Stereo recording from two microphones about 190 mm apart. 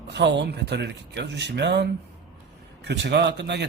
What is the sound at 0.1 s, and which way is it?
Speech, 65° right (ahead or behind).